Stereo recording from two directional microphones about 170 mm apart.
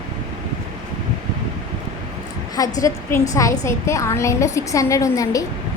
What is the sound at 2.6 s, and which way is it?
A woman's voice, 20° left (ahead or behind).